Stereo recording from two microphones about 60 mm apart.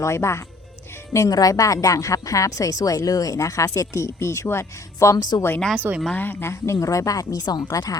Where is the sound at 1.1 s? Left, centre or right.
Left.